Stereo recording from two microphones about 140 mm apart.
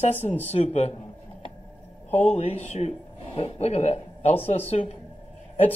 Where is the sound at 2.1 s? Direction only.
50° left (ahead or behind).